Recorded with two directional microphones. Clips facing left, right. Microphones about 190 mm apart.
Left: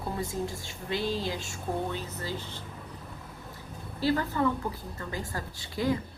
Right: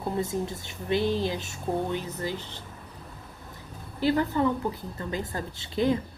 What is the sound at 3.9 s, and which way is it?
A woman's voice, 20° right (ahead or behind).